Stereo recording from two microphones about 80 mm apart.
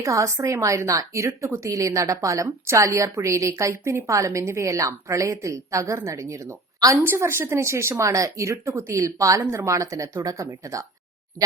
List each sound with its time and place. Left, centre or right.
0.0 s a woman's voice: right
6.9 s a woman's voice: right